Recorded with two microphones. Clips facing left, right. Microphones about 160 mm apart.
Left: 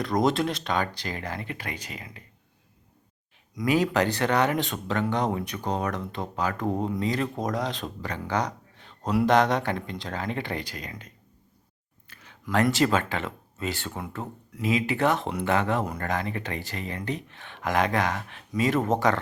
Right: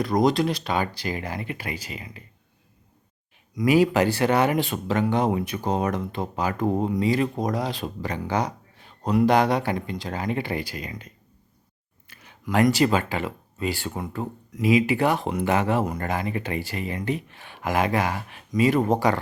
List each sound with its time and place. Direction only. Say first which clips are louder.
0.0 s speech: right 3 dB; centre (ahead or behind)
3.7 s speech: right 4 dB; 10° right (ahead or behind)
12.0 s a sound: right 4 dB; 10° right (ahead or behind)
12.7 s speech: right 2 dB; 5° right (ahead or behind)